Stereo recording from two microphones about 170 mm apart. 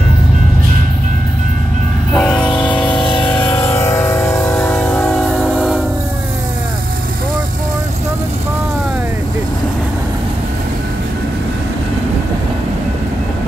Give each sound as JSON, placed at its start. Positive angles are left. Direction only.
{"t": 2.1, "sound": "train", "side_deg": 5}
{"t": 2.9, "sound": "vehicle", "side_deg": 30}
{"t": 3.3, "sound": "music", "side_deg": 15}
{"t": 4.6, "sound": "train", "side_deg": 10}